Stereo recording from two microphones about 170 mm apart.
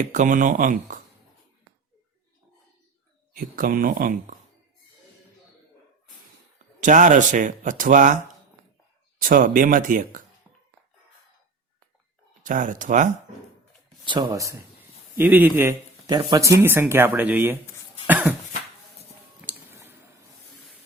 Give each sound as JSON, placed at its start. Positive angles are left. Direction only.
{"t": 0.0, "sound": "speech", "side_deg": -50}
{"t": 3.3, "sound": "speech", "side_deg": -55}
{"t": 6.8, "sound": "speech", "side_deg": -50}
{"t": 10.5, "sound": "music", "side_deg": -15}
{"t": 12.4, "sound": "speech", "side_deg": -50}
{"t": 14.0, "sound": "a man's voice", "side_deg": -30}
{"t": 18.0, "sound": "cough", "side_deg": -10}
{"t": 19.5, "sound": "a sound", "side_deg": -15}